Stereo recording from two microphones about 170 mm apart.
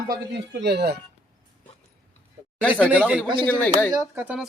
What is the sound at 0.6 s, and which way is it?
Speech, 75° right (ahead or behind).